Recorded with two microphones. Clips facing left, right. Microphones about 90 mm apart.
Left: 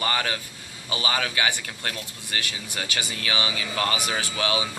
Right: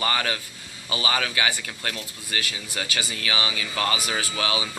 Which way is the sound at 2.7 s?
30° left (ahead or behind).